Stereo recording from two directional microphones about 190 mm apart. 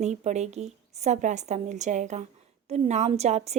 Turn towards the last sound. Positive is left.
turn(degrees=-35)  # may be behind; listen again after turning